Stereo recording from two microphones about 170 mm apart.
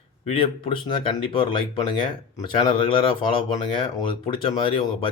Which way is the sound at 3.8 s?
25° left (ahead or behind).